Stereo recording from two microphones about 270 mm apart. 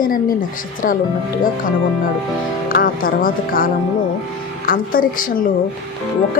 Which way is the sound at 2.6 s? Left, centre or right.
Left.